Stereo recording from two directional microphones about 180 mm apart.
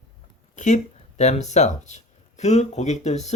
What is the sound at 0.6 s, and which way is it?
Speech, 40° left (ahead or behind).